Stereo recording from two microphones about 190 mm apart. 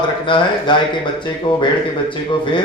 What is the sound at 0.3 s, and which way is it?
A man's voice, 25° left (ahead or behind).